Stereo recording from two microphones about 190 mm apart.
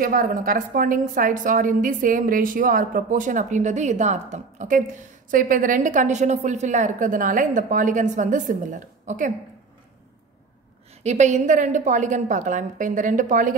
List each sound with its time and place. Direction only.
0.0 s a woman's voice: 50° right (ahead or behind)
11.0 s a woman's voice: 35° right (ahead or behind)